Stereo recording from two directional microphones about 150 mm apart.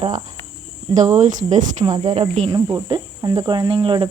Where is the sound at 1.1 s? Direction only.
55° right (ahead or behind).